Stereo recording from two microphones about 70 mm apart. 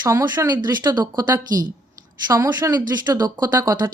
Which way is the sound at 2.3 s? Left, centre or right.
Right.